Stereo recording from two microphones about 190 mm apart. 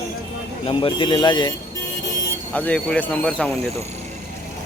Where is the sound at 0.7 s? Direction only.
25° left (ahead or behind).